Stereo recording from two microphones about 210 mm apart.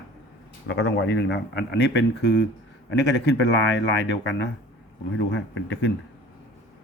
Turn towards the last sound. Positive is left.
turn(degrees=65)  # may be behind; listen again after turning